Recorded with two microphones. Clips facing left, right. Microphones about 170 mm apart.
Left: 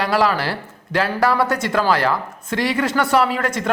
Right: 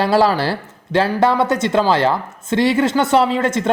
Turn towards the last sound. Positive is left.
turn(degrees=-25)  # may be behind; listen again after turning